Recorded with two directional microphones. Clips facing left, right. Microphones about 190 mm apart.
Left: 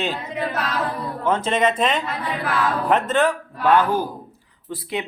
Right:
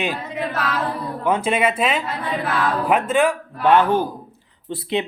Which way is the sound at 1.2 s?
10° right (ahead or behind).